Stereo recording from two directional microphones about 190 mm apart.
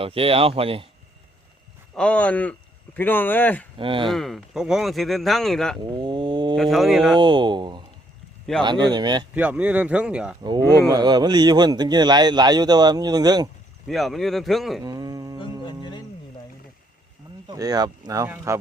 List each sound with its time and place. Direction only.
0.0 s speech: 30° right (ahead or behind)
2.0 s speech: 5° left (ahead or behind)
3.8 s speech: 25° right (ahead or behind)
4.1 s speech: centre (ahead or behind)
5.8 s wild animals: 25° right (ahead or behind)
6.6 s speech: centre (ahead or behind)
7.2 s speech: 25° right (ahead or behind)
9.3 s speech: 10° right (ahead or behind)
10.4 s speech: 20° right (ahead or behind)
13.8 s speech: centre (ahead or behind)
14.8 s a sound: 20° right (ahead or behind)
15.6 s music: 25° left (ahead or behind)
17.5 s speech: 20° right (ahead or behind)